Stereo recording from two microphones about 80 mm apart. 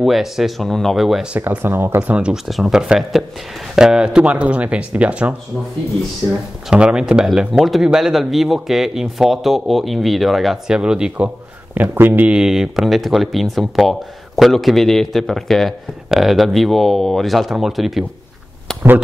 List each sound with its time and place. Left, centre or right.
0.0 s speech: centre
1.3 s speech: centre
1.6 s speech: right
6.2 s speech: centre
6.7 s speech: centre
12.3 s speech: centre
18.7 s a sound: centre